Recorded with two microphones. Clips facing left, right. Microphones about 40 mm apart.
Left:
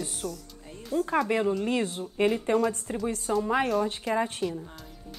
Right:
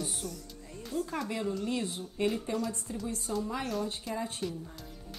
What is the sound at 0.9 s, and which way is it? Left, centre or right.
Speech, left.